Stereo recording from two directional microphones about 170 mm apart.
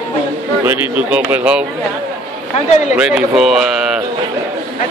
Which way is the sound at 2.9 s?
5° right (ahead or behind).